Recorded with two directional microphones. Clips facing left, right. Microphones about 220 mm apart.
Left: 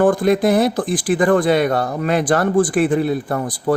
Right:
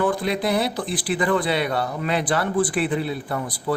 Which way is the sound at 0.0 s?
50° left (ahead or behind).